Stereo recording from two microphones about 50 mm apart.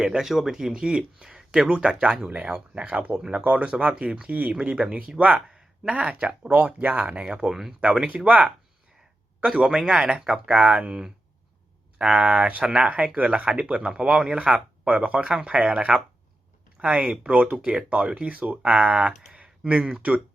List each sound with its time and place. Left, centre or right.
0.2 s speech: centre
3.4 s speech: right
5.3 s speech: centre
7.3 s speech: centre
8.0 s speech: right
9.4 s speech: centre
10.5 s speech: right
10.8 s speech: centre
17.8 s speech: right
19.4 s computer keyboard: right
19.8 s speech: right